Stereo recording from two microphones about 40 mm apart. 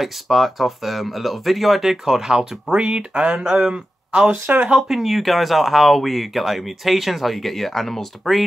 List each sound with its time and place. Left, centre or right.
0.0 s speech: centre; by 4.3 s right
4.3 s speech: right
4.7 s speech: centre